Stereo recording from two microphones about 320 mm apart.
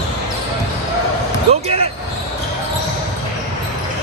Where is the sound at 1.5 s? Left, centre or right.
Centre.